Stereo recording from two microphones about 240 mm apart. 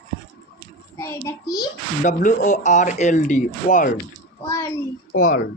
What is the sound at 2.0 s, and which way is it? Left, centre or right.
Speech, left.